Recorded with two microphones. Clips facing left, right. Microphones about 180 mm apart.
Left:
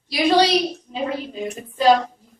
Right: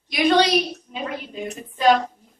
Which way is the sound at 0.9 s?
25° left (ahead or behind).